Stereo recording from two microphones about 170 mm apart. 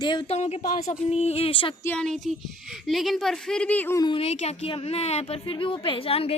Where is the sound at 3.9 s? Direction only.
30° left (ahead or behind).